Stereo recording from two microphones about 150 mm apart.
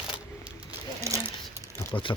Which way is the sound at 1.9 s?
35° left (ahead or behind).